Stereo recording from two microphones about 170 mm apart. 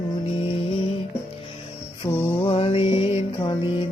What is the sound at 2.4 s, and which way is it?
Music, 30° left (ahead or behind).